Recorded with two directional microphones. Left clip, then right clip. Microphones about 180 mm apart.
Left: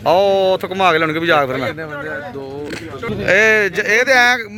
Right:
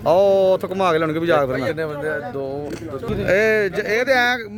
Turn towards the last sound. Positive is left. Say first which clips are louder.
# left 5 dB
turn(degrees=-5)  # may be behind; listen again after turning